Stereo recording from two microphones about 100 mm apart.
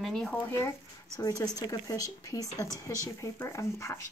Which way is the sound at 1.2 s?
35° left (ahead or behind).